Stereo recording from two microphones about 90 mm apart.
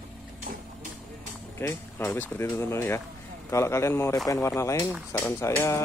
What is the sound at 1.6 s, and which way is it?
Speech, 20° left (ahead or behind).